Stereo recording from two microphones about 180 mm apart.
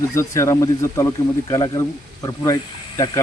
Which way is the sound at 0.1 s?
15° left (ahead or behind).